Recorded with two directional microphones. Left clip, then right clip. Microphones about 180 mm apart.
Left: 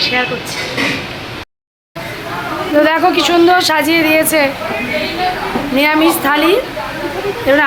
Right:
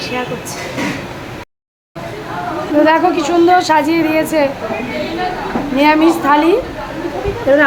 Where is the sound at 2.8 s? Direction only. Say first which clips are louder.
Even; centre (ahead or behind).